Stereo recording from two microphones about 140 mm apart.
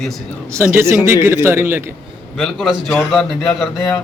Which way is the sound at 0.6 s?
20° right (ahead or behind).